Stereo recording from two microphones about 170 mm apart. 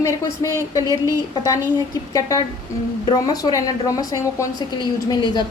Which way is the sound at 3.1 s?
25° left (ahead or behind).